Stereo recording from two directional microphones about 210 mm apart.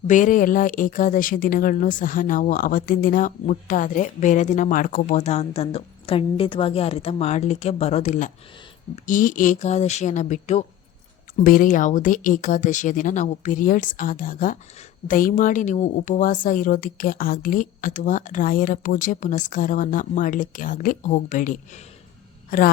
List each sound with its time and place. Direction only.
0.1 s speech: 40° left (ahead or behind)